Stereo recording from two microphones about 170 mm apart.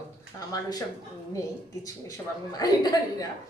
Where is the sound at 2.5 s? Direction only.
20° left (ahead or behind).